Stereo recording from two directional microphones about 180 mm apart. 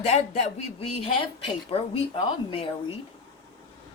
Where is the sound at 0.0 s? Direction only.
35° left (ahead or behind).